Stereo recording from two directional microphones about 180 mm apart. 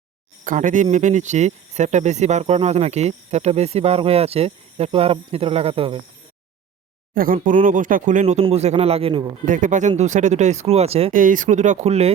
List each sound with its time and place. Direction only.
0.4 s speech: 45° right (ahead or behind); by 6.0 s 30° right (ahead or behind)
7.1 s speech: 50° right (ahead or behind); by 9.3 s 30° right (ahead or behind)
9.5 s speech: 45° right (ahead or behind)
11.1 s speech: 50° right (ahead or behind)